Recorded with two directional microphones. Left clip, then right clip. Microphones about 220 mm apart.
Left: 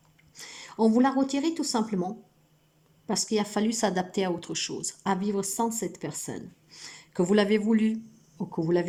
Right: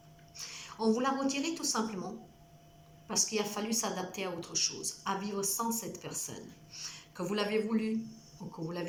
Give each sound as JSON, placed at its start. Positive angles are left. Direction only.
{"t": 0.3, "sound": "a woman's voice", "side_deg": 40}
{"t": 3.1, "sound": "speech", "side_deg": 40}